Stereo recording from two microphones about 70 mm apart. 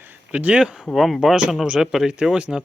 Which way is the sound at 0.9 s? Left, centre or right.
Centre.